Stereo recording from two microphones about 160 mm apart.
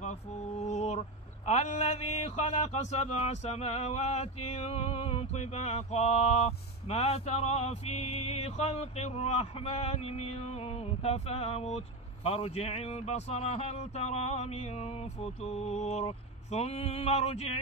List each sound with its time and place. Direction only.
0.7 s mantra: 45° left (ahead or behind)